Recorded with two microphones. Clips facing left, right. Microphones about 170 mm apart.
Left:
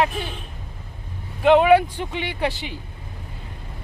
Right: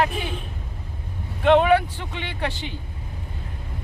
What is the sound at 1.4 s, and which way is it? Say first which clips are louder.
Speech: left 2 dB; 5° left (ahead or behind).